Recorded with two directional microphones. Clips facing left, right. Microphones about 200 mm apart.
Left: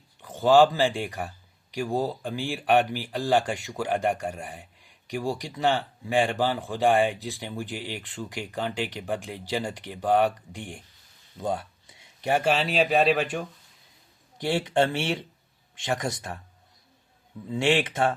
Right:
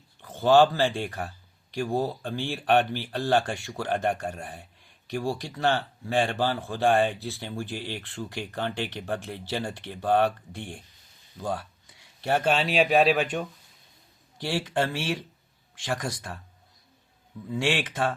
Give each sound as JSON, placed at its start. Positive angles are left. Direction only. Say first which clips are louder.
{"t": 0.2, "sound": "a man's voice", "louder": "left 1 dB", "side_deg": 15}
{"t": 14.3, "sound": "speech", "louder": "left 4 dB", "side_deg": 20}
{"t": 17.5, "sound": "speech", "louder": "left 4 dB", "side_deg": 25}